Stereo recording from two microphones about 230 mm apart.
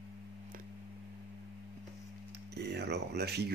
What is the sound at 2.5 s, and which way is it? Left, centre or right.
Speech, right.